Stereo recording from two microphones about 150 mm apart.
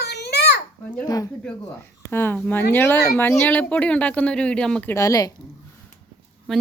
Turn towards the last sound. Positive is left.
turn(degrees=0)  # may be behind; listen again after turning